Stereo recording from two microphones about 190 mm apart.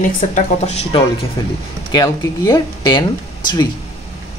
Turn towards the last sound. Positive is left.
turn(degrees=20)  # may be behind; listen again after turning